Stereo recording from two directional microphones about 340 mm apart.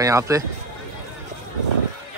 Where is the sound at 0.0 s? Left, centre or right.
Centre.